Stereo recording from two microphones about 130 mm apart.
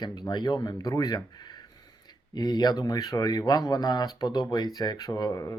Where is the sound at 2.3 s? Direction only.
30° left (ahead or behind).